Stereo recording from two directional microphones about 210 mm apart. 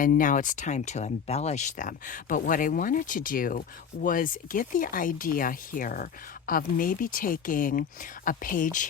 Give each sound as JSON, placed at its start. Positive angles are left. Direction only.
{"t": 0.0, "sound": "speech", "side_deg": 40}